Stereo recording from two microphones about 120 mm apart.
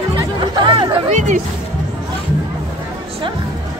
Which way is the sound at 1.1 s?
90° right.